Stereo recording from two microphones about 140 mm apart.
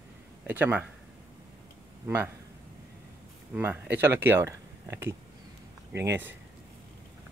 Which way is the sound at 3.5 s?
15° right (ahead or behind).